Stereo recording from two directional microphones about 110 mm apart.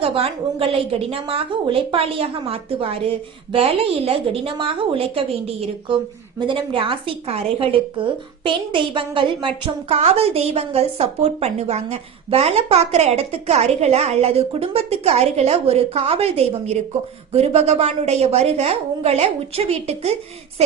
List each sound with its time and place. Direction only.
0.0 s a woman's voice: 55° right (ahead or behind)
6.4 s a woman's voice: 50° right (ahead or behind)
9.9 s a woman's voice: 70° right (ahead or behind)